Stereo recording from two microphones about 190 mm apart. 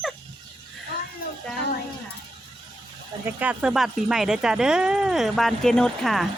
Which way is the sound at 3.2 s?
5° right (ahead or behind).